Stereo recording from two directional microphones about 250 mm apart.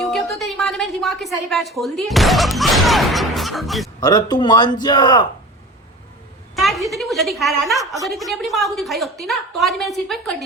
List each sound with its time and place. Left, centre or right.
0.0 s a sound: centre
0.3 s speech: centre
4.0 s a man's voice: centre
6.6 s a woman's voice: centre